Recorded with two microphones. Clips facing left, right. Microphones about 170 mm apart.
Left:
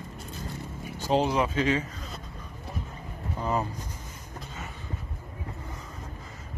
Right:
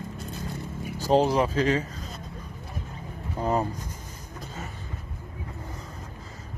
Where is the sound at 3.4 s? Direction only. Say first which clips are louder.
Right 3 dB; 40° right (ahead or behind).